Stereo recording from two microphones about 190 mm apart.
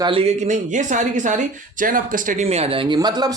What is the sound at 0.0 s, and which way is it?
Speech, 30° right (ahead or behind).